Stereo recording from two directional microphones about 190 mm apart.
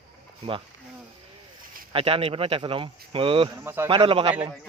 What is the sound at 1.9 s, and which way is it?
Speech, 30° right (ahead or behind).